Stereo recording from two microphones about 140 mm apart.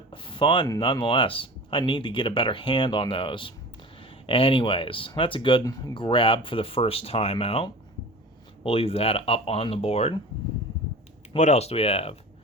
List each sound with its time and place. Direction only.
0.1 s a sound: 35° left (ahead or behind)
0.8 s speech: 35° left (ahead or behind)
11.3 s speech: 55° left (ahead or behind)